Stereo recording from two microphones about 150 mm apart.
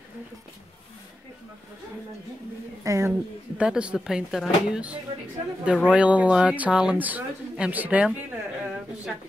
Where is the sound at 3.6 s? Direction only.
5° right (ahead or behind).